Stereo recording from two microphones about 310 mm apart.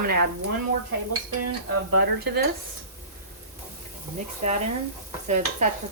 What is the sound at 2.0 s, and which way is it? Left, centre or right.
Speech, right.